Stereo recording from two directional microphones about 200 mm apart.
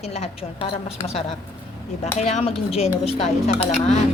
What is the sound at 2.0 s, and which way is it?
Speech, 35° left (ahead or behind).